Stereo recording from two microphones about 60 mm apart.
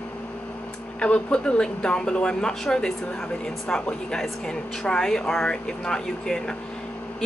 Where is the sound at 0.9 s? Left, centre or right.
Centre.